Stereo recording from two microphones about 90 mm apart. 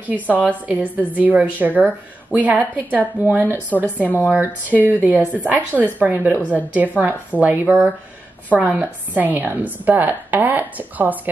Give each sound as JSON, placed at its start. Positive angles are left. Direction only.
{"t": 0.0, "sound": "a woman's voice", "side_deg": -15}